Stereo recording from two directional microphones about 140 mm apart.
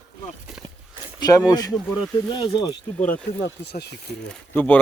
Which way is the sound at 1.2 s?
25° left (ahead or behind).